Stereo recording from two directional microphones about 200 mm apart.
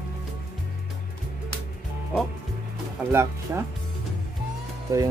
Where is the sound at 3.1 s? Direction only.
10° right (ahead or behind).